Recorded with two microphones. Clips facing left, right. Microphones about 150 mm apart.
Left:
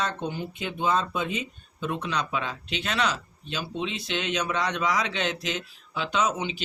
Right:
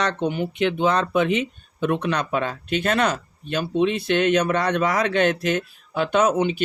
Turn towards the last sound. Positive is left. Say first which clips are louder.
# right 8 dB
turn(degrees=-55)  # may be behind; listen again after turning